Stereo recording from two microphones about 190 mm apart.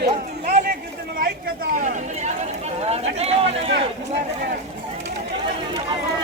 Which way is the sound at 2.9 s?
35° right (ahead or behind).